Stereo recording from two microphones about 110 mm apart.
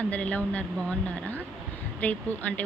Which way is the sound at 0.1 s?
15° left (ahead or behind).